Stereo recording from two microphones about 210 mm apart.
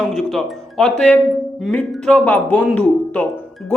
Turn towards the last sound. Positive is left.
turn(degrees=5)  # may be behind; listen again after turning